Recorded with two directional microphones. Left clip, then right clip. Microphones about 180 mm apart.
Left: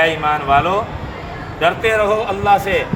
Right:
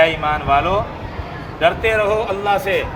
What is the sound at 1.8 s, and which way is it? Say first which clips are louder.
Speech: left 1 dB; 15° right (ahead or behind).